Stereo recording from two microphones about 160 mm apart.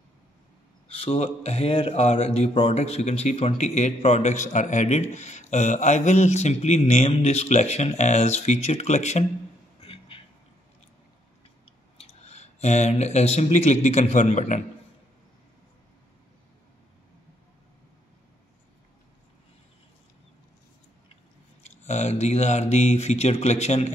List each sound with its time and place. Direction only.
0.8 s speech: 35° left (ahead or behind)
9.8 s a sound: 35° left (ahead or behind)
12.0 s speech: 40° left (ahead or behind)
21.6 s speech: 45° left (ahead or behind)